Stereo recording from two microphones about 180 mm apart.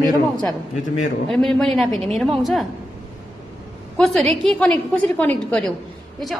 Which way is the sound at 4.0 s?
Centre (ahead or behind).